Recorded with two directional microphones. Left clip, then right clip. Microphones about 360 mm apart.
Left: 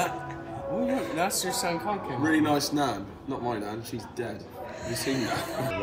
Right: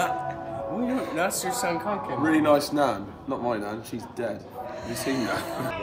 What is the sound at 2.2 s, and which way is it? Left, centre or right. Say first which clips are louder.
A man's voice: right 4 dB; centre.